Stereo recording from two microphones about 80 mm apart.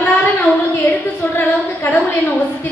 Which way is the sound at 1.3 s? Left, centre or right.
Left.